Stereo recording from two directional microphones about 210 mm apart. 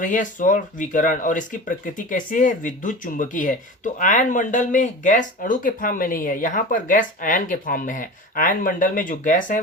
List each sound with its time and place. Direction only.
0.0 s speech: 40° left (ahead or behind)